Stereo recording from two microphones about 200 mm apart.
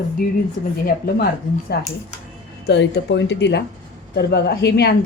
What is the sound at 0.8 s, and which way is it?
A woman's voice, 50° left (ahead or behind).